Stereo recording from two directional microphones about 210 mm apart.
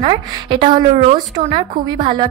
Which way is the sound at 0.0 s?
25° right (ahead or behind).